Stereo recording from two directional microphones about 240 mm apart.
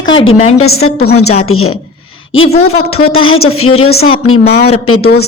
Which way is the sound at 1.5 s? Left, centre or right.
Left.